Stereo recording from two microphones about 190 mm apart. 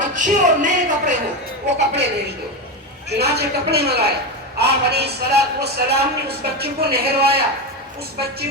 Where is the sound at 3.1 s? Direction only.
60° right (ahead or behind).